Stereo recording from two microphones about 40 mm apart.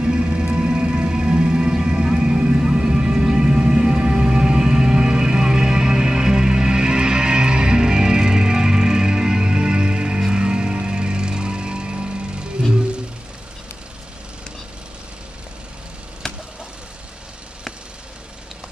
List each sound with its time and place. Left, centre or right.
0.0 s music: right